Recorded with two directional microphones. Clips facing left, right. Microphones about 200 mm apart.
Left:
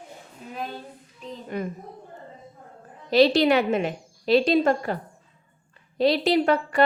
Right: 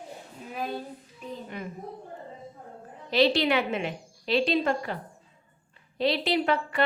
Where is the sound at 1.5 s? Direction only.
45° left (ahead or behind).